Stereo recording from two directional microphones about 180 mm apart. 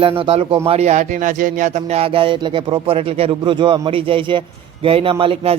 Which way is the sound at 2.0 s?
30° right (ahead or behind).